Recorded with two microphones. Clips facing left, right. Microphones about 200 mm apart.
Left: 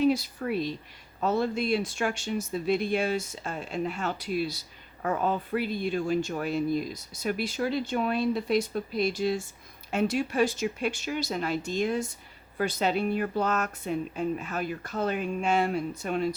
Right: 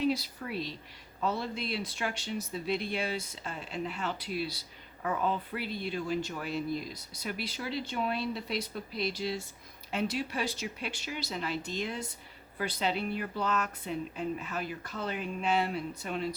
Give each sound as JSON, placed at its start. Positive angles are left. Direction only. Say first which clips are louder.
{"t": 0.0, "sound": "speech", "louder": "left 6 dB", "side_deg": 50}